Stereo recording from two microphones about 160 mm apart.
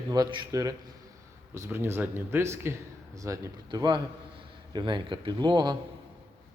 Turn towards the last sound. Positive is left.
turn(degrees=-25)  # may be behind; listen again after turning